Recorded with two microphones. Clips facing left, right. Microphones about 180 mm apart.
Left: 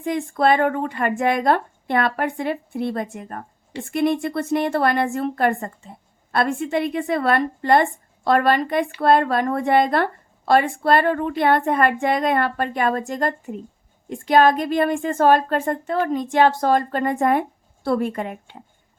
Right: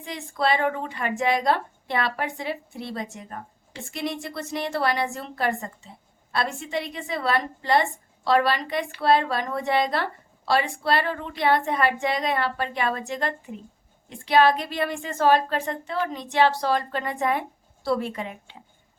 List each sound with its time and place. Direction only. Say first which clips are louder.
0.0 s a woman's voice: left 7 dB; 50° left (ahead or behind)